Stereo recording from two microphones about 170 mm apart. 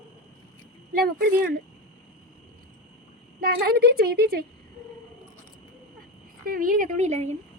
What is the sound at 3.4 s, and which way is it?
A woman's voice, 60° right (ahead or behind).